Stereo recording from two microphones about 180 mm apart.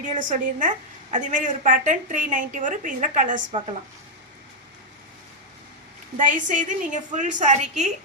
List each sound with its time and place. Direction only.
0.2 s a woman's voice: 45° right (ahead or behind)
6.1 s a woman's voice: 45° right (ahead or behind)